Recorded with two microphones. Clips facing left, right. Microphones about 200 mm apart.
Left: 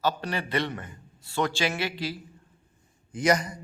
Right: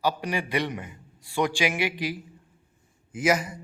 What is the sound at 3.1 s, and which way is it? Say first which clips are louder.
Speech: even; 5° right (ahead or behind).